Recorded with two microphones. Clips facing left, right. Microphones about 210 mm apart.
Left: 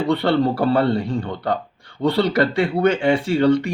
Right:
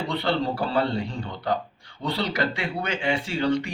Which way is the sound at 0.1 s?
60° left (ahead or behind).